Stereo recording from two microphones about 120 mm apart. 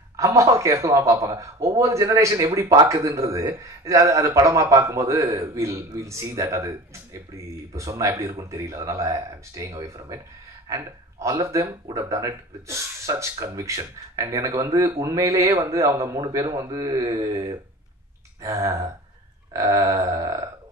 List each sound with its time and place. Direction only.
0.2 s speech: 25° right (ahead or behind)
7.7 s speech: 25° right (ahead or behind)